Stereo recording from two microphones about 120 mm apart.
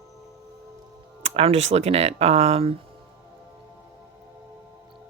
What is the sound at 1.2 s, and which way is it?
Speech, 60° right (ahead or behind).